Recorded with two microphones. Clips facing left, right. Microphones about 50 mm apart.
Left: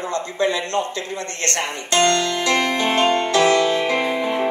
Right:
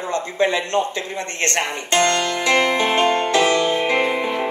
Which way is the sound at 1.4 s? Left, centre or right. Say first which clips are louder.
Right 3 dB; right.